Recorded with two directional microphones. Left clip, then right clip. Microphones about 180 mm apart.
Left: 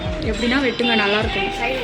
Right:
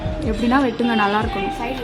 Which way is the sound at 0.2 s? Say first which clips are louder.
Right 2 dB; 45° right (ahead or behind).